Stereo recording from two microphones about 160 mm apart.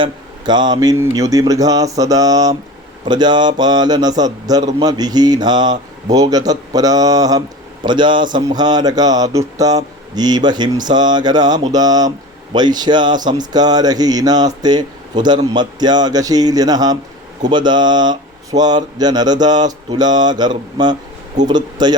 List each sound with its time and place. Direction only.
0.0 s speech: 25° right (ahead or behind)